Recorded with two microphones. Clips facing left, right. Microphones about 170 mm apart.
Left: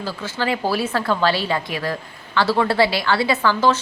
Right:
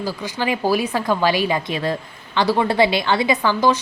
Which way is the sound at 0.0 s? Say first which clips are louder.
Right 1 dB; 15° right (ahead or behind).